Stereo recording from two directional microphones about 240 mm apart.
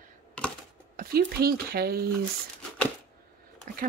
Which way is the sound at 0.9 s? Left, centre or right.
Right.